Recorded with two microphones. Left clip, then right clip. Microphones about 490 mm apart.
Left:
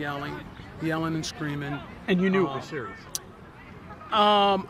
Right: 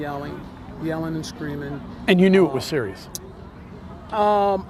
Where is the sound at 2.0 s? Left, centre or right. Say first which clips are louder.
Right 8 dB; right.